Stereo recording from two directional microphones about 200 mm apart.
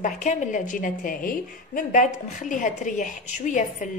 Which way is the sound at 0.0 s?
40° left (ahead or behind).